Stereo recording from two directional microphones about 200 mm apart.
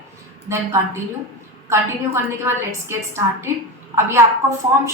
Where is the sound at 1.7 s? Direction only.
15° right (ahead or behind).